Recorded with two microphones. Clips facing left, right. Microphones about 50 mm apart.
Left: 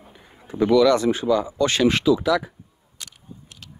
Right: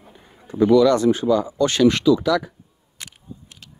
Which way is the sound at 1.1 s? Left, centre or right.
Left.